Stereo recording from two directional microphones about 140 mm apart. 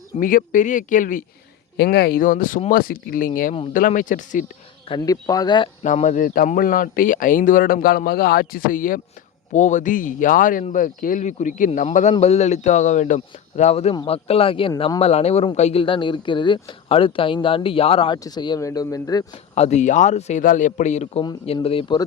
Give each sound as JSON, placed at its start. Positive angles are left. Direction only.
{"t": 0.2, "sound": "speech", "side_deg": 80}
{"t": 2.0, "sound": "speech", "side_deg": 85}
{"t": 3.7, "sound": "speech", "side_deg": 75}
{"t": 4.9, "sound": "speech", "side_deg": 30}
{"t": 5.8, "sound": "speech", "side_deg": 60}
{"t": 9.5, "sound": "speech", "side_deg": 60}
{"t": 18.2, "sound": "speech", "side_deg": 30}
{"t": 19.5, "sound": "speech", "side_deg": 55}
{"t": 20.4, "sound": "speech", "side_deg": 70}